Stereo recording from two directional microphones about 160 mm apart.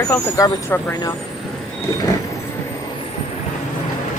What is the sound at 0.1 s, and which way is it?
Speech, 15° left (ahead or behind).